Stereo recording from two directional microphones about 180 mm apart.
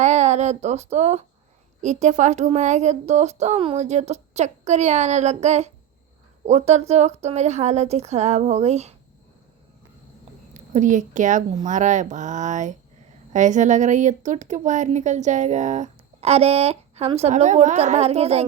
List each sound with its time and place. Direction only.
0.0 s a sound: 40° right (ahead or behind)
1.8 s a woman's voice: 40° right (ahead or behind)
10.5 s a woman's voice: 45° right (ahead or behind)